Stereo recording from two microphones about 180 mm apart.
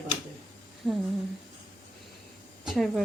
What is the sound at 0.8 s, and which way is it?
Speech, centre (ahead or behind).